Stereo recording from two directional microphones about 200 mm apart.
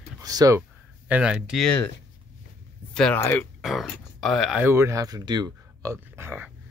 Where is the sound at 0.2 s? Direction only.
20° right (ahead or behind); by 1.9 s 5° left (ahead or behind).